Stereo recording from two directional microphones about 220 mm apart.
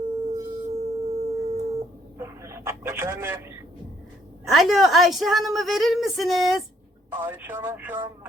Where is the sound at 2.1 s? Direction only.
15° right (ahead or behind).